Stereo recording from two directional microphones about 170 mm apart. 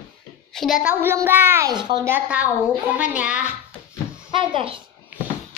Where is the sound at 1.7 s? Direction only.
25° right (ahead or behind).